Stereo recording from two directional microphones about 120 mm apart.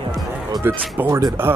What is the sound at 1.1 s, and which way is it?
Speech, 30° right (ahead or behind).